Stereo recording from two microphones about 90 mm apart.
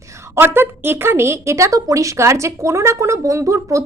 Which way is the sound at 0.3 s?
25° right (ahead or behind).